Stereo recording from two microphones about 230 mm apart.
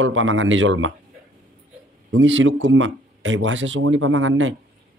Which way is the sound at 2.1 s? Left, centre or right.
Right.